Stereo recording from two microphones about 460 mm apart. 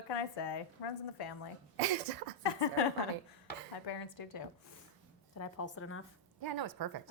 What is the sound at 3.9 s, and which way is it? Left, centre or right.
Speech, left.